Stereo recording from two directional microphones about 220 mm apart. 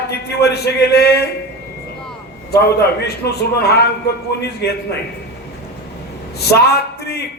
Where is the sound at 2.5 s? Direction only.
45° left (ahead or behind).